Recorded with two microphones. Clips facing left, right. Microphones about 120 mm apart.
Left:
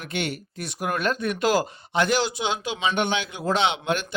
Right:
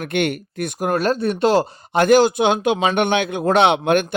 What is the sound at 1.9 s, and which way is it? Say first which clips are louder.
Speech: right 9 dB; 50° right (ahead or behind).